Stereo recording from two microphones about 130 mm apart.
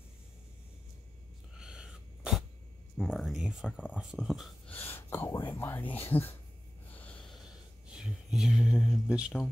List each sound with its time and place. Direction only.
1.6 s sneeze: 5° right (ahead or behind)
3.0 s speech: centre (ahead or behind)
4.6 s speech: 15° left (ahead or behind)
6.9 s snort: 10° left (ahead or behind)
7.9 s speech: 5° right (ahead or behind)